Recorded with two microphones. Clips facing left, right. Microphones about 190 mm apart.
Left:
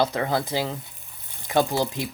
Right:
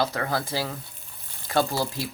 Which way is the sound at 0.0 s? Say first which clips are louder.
Left 3 dB; 20° left (ahead or behind).